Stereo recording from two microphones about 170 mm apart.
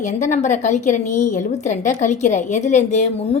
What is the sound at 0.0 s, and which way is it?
A woman's voice, 45° left (ahead or behind).